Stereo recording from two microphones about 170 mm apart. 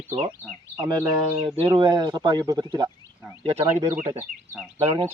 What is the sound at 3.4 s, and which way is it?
Speech, 35° right (ahead or behind).